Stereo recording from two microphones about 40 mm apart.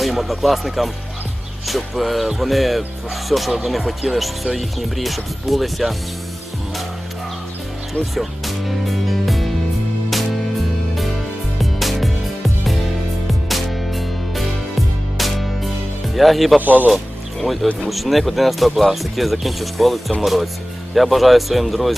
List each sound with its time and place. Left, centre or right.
0.0 s speech: centre
8.1 s music: centre
11.6 s music: centre
13.5 s music: centre
16.1 s speech: centre
16.6 s speech: right
17.4 s speech: centre